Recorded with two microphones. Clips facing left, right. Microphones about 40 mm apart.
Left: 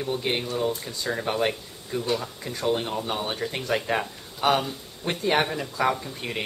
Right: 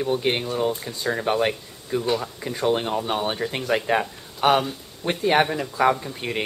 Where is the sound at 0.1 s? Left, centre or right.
Right.